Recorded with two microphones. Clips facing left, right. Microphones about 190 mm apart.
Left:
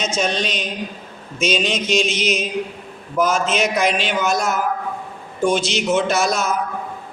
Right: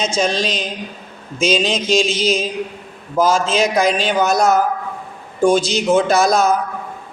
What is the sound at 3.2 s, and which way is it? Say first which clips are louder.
A man's voice: right 4 dB; 30° right (ahead or behind).